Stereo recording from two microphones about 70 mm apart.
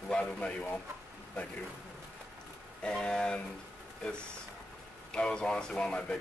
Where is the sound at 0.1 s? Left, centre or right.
Centre.